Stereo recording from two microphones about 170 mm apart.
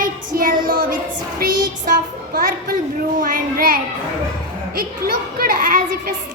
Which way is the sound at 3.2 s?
55° right (ahead or behind).